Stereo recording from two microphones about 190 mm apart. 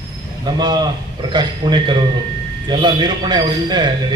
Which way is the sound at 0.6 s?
20° right (ahead or behind).